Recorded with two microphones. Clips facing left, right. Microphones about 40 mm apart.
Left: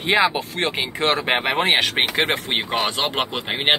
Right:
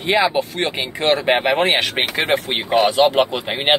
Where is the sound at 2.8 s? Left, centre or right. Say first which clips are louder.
Right 12 dB; centre.